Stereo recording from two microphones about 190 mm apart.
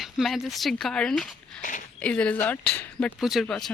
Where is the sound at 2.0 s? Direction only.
5° left (ahead or behind).